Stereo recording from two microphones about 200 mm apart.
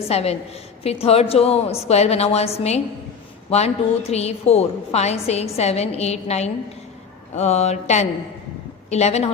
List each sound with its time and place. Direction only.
0.1 s a woman's voice: 30° left (ahead or behind)